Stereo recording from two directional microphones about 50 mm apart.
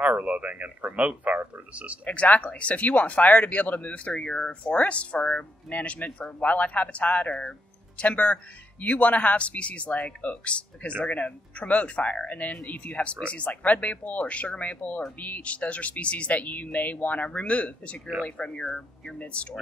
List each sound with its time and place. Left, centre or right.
0.0 s speech: right
2.0 s speech: left
5.7 s speech: left